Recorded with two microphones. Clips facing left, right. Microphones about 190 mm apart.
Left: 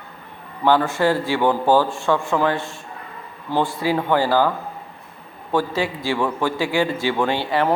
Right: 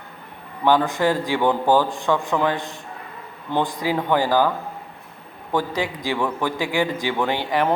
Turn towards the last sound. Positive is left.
turn(degrees=-15)  # may be behind; listen again after turning